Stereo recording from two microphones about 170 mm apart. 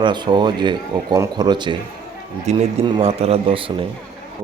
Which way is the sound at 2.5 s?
40° right (ahead or behind).